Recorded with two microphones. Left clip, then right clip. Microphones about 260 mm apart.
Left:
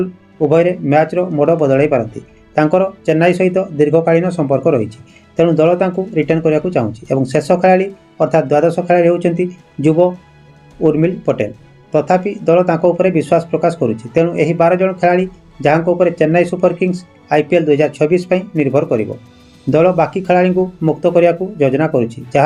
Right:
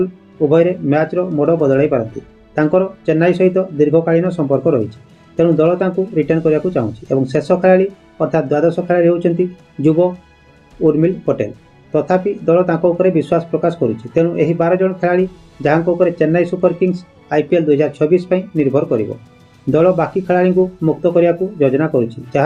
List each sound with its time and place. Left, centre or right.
0.3 s speech: left